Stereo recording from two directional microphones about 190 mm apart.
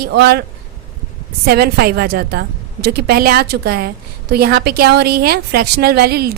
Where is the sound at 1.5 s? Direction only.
55° right (ahead or behind).